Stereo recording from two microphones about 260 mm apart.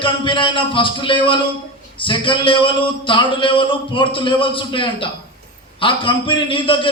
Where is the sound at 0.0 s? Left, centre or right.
Centre.